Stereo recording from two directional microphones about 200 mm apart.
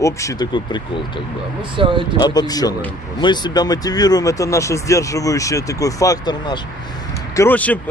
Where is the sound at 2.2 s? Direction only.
20° left (ahead or behind).